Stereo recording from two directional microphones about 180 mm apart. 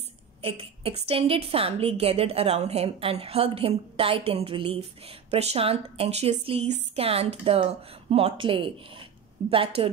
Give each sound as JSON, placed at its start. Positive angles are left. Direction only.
{"t": 0.4, "sound": "a woman's voice", "side_deg": -30}